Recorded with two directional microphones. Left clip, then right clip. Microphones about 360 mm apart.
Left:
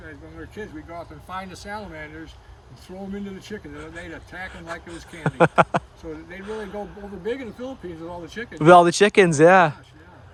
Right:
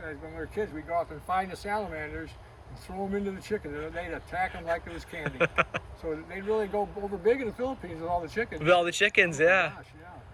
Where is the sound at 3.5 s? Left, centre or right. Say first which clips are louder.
Right 4 dB; centre.